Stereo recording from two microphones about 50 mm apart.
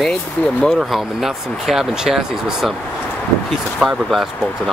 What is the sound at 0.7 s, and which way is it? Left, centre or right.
Speech, centre.